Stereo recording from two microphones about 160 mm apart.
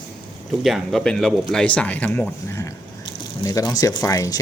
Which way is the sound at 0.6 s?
Centre (ahead or behind).